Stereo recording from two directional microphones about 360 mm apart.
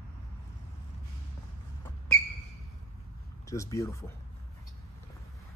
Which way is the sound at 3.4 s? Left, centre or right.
Centre.